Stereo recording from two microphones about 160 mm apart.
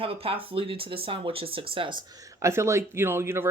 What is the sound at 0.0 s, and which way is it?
Speech, 35° right (ahead or behind).